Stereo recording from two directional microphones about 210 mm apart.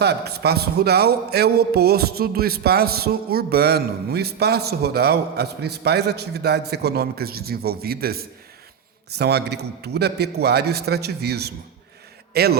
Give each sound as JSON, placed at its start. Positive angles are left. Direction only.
{"t": 0.0, "sound": "a man's voice", "side_deg": -50}